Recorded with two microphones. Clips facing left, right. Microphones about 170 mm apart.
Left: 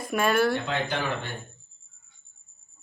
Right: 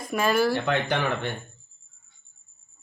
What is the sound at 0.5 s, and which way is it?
Speech, 60° right (ahead or behind).